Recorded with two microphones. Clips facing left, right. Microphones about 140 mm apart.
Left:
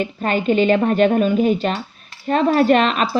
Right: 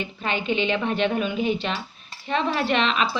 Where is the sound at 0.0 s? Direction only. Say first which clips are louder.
Left 8 dB; 45° left (ahead or behind).